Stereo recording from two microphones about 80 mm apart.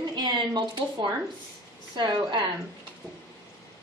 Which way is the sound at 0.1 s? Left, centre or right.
Right.